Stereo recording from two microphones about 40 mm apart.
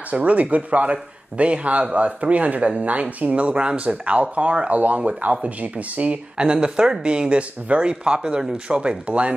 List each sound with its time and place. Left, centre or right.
0.1 s speech: right
6.3 s speech: right
7.9 s speech: right